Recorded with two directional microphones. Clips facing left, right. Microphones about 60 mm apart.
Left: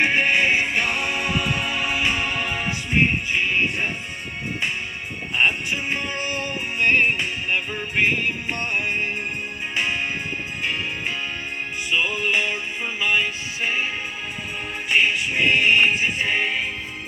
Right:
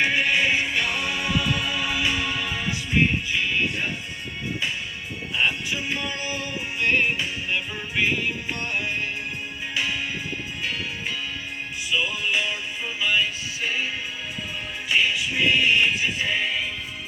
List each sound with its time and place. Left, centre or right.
0.0 s music: left
5.3 s music: left
11.9 s music: left